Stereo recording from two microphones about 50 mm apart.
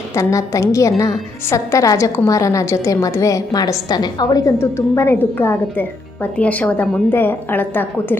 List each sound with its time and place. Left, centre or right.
0.1 s a woman's voice: left
4.4 s a woman's voice: left
5.2 s a woman's voice: left
6.3 s speech: left
7.1 s a woman's voice: left